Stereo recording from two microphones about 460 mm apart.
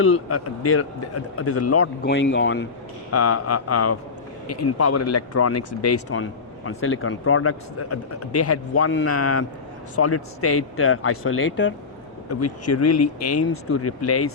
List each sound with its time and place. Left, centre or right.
0.0 s speech: left